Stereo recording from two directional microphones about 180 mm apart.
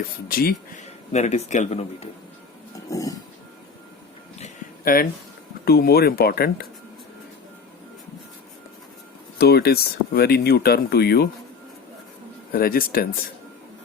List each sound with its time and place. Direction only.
0.3 s speech: 55° left (ahead or behind)
1.1 s a man's voice: 40° left (ahead or behind)
2.7 s a sound: 20° left (ahead or behind)
4.4 s a sound: 40° left (ahead or behind)
5.6 s speech: 60° left (ahead or behind)
9.4 s speech: 60° left (ahead or behind)
12.5 s speech: 55° left (ahead or behind)